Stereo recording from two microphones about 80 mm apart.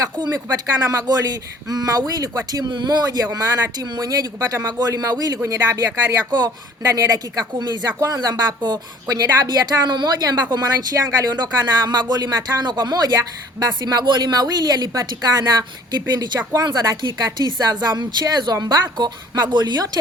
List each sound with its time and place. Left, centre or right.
0.4 s speech: right
1.0 s speech: right
17.0 s speech: right